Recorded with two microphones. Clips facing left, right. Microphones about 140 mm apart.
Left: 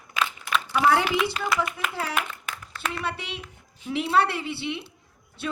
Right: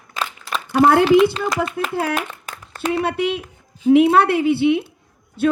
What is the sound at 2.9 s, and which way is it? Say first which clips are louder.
A woman's voice: right 12 dB; 55° right (ahead or behind).